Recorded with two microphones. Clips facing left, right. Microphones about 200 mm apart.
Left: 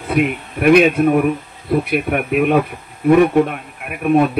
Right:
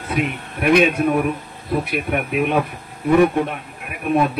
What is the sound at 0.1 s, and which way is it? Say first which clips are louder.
A man's voice: left 6 dB; 55° left (ahead or behind).